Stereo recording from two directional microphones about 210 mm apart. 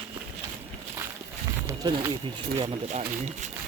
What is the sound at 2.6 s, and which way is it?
Speech, 35° right (ahead or behind).